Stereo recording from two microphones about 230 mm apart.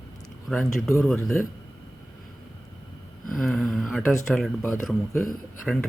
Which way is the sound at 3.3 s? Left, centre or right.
Centre.